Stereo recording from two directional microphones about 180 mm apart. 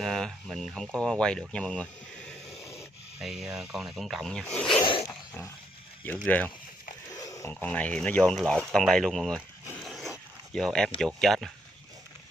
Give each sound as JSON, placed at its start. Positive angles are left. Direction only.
{"t": 0.0, "sound": "speech", "side_deg": 0}
{"t": 3.2, "sound": "speech", "side_deg": -5}
{"t": 4.7, "sound": "zipper", "side_deg": 30}
{"t": 6.2, "sound": "speech", "side_deg": 10}
{"t": 9.8, "sound": "a sound", "side_deg": 0}
{"t": 11.0, "sound": "speech", "side_deg": 5}